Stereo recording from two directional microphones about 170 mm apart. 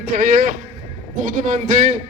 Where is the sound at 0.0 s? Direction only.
55° right (ahead or behind).